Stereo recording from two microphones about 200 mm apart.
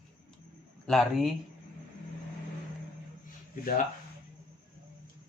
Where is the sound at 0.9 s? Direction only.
Centre (ahead or behind).